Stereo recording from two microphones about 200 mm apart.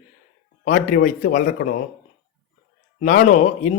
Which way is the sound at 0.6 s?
40° left (ahead or behind).